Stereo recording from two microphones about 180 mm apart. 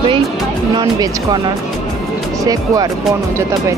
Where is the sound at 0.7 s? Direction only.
20° right (ahead or behind).